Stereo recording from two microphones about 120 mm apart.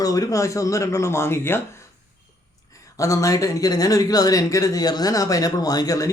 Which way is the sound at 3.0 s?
25° left (ahead or behind).